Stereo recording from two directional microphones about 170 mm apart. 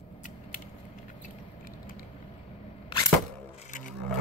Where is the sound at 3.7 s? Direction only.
50° left (ahead or behind).